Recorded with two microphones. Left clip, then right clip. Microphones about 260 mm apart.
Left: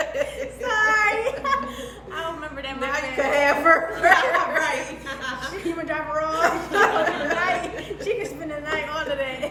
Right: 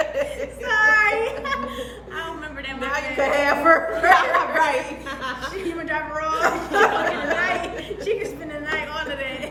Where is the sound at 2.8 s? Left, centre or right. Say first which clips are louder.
Right 1 dB; centre.